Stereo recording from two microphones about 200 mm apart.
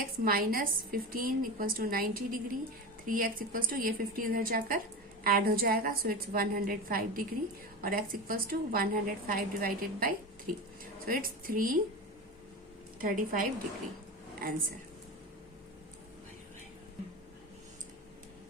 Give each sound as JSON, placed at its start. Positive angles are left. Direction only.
{"t": 0.0, "sound": "a woman's voice", "side_deg": -45}
{"t": 13.0, "sound": "a woman's voice", "side_deg": -45}